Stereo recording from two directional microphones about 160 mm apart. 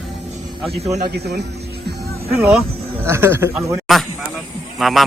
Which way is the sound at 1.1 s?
90° right.